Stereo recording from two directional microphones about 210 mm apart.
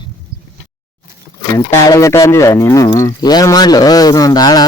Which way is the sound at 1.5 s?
15° left (ahead or behind).